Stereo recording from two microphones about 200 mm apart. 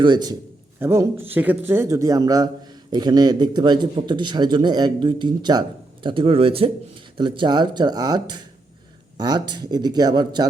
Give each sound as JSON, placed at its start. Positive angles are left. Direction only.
{"t": 0.0, "sound": "speech", "side_deg": -20}